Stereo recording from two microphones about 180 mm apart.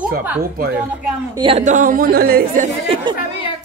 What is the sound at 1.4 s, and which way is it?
Speech, 35° right (ahead or behind).